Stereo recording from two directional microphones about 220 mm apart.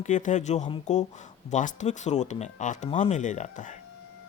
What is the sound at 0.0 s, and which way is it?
Speech, 35° left (ahead or behind).